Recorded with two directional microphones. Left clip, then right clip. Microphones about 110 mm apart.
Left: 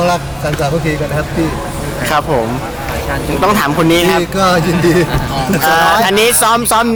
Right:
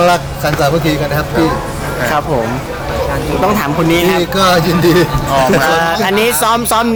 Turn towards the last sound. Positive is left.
turn(degrees=0)  # may be behind; listen again after turning